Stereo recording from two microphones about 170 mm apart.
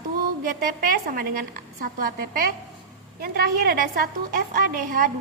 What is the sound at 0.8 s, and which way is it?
A woman's voice, 55° right (ahead or behind).